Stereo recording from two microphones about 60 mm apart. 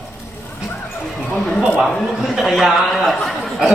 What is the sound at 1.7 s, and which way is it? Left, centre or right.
A man's voice, centre.